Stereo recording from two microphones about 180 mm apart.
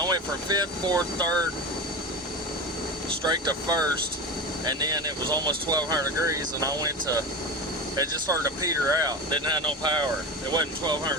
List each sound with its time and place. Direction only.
0.0 s speech: 20° right (ahead or behind)
3.2 s speech: 20° right (ahead or behind)